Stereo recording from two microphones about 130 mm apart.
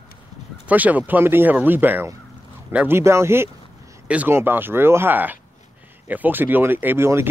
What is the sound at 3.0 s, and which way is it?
Speech, 20° right (ahead or behind).